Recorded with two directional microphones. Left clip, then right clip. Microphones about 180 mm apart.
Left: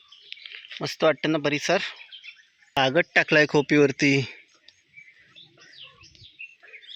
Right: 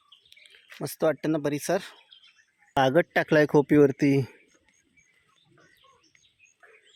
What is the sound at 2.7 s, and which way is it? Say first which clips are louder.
Speech: left 1 dB; 25° right (ahead or behind).